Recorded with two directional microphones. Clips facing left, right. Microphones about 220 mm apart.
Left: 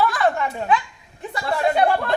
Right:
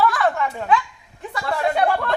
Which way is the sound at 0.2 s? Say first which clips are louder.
Left 1 dB; 25° left (ahead or behind).